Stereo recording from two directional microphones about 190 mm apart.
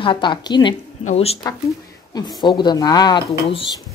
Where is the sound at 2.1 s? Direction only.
20° left (ahead or behind).